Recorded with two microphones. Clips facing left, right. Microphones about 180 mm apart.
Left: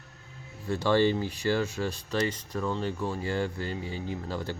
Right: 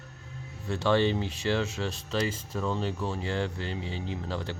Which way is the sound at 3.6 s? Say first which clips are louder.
Left 1 dB; 70° right (ahead or behind).